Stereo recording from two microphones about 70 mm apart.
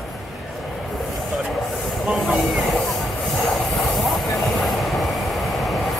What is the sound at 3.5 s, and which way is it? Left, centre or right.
Train, centre.